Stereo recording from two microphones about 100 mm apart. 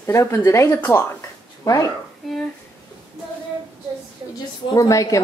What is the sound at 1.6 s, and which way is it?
Speech, 35° left (ahead or behind).